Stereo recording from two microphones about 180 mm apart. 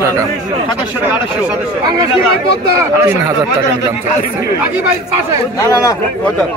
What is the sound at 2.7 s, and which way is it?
Speech, 15° right (ahead or behind).